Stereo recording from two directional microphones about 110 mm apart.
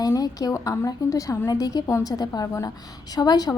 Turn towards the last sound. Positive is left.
turn(degrees=35)  # may be behind; listen again after turning